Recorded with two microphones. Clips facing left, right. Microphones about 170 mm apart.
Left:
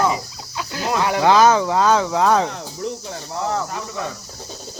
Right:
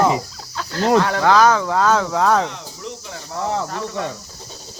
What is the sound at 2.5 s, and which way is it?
Cricket, 40° left (ahead or behind).